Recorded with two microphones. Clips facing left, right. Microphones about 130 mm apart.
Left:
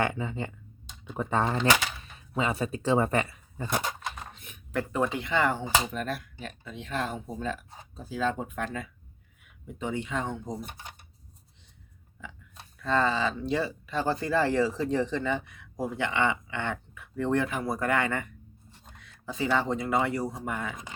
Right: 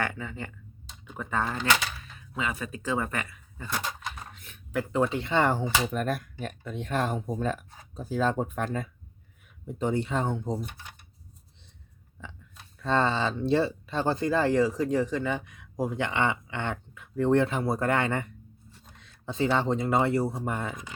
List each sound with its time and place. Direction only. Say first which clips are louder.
0.0 s speech: left 4 dB; 20° left (ahead or behind)
4.4 s a sound: left 1 dB; 15° left (ahead or behind)
5.2 s speech: right 2 dB; 35° right (ahead or behind)
12.8 s speech: right 1 dB; 30° right (ahead or behind)